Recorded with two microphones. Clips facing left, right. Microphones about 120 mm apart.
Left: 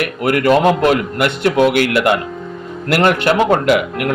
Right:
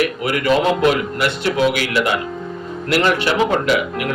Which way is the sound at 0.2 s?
50° left (ahead or behind).